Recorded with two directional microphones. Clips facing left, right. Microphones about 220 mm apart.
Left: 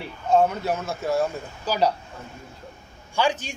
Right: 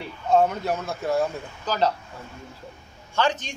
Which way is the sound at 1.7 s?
10° left (ahead or behind).